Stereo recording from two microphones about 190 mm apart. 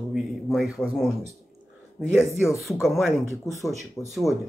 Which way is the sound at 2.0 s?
5° right (ahead or behind).